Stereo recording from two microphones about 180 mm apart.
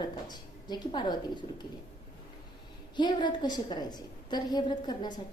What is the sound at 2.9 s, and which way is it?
A woman's voice, 25° left (ahead or behind).